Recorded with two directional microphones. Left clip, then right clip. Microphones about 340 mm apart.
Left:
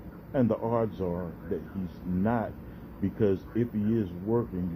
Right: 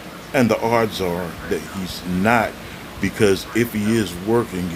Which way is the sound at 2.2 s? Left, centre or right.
Centre.